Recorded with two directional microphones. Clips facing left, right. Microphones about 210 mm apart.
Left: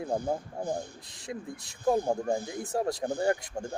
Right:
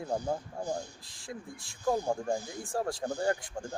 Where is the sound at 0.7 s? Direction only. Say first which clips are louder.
Left 2 dB; 20° left (ahead or behind).